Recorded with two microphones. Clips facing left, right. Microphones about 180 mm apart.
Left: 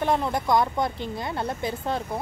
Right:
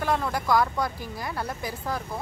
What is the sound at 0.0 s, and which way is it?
Speech, 20° left (ahead or behind).